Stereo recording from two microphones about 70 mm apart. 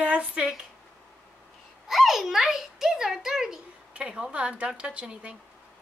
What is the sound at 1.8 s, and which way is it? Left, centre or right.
A child's voice, centre.